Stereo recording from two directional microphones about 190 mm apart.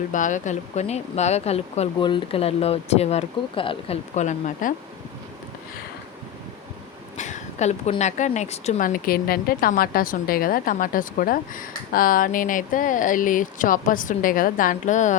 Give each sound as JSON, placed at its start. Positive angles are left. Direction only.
{"t": 0.1, "sound": "speech", "side_deg": 40}
{"t": 7.2, "sound": "a woman's voice", "side_deg": 40}